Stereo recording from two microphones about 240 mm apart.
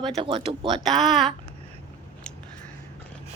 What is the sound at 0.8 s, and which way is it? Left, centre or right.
Speech, centre.